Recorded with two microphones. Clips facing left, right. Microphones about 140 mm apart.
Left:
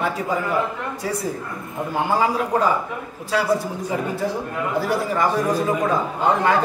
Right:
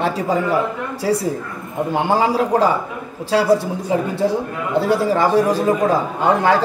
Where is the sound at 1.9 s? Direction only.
30° right (ahead or behind).